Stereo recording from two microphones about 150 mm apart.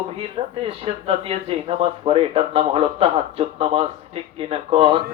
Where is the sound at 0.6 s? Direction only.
40° right (ahead or behind).